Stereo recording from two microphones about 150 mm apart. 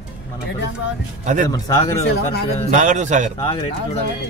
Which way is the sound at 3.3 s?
35° left (ahead or behind).